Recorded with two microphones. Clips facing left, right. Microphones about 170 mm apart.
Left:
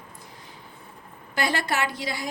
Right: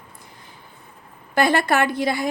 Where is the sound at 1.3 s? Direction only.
55° right (ahead or behind).